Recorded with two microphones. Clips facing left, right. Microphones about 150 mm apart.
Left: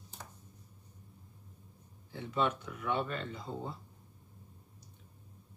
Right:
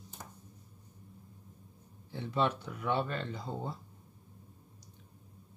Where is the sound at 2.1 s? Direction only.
30° right (ahead or behind).